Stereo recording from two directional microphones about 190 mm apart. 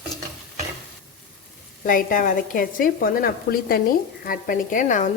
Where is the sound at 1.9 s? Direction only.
45° left (ahead or behind).